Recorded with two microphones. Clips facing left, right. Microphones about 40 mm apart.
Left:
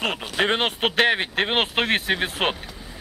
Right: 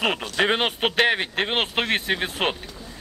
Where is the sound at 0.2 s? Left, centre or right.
Centre.